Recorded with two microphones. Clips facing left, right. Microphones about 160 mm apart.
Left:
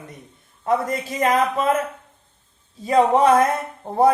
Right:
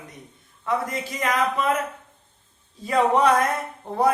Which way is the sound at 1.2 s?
25° left (ahead or behind).